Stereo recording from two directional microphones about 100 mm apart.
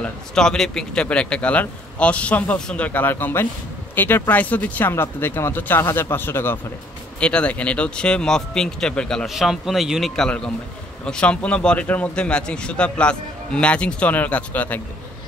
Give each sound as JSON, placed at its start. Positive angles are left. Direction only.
{"t": 0.0, "sound": "a man's voice", "side_deg": 5}
{"t": 7.2, "sound": "a man's voice", "side_deg": 10}